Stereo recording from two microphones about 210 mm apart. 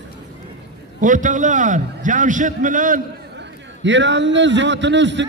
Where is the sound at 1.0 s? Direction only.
35° right (ahead or behind).